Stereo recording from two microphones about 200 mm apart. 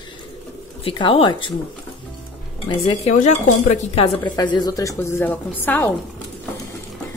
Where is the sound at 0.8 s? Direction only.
25° left (ahead or behind).